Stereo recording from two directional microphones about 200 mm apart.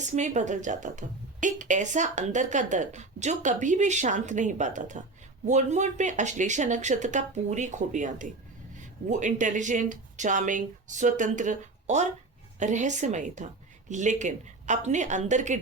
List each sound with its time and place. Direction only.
0.2 s a woman's voice: 35° right (ahead or behind)